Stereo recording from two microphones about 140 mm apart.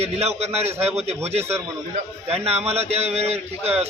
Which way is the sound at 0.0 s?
50° right (ahead or behind).